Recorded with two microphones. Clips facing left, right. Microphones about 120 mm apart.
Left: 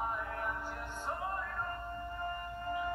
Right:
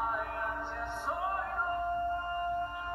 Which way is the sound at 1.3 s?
60° right (ahead or behind).